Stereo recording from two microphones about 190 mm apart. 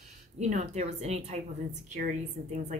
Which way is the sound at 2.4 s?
50° right (ahead or behind).